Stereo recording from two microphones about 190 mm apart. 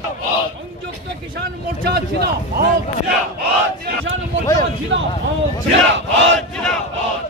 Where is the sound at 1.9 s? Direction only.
55° right (ahead or behind).